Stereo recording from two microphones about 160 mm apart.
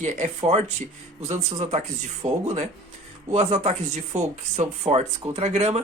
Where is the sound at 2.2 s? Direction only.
45° right (ahead or behind).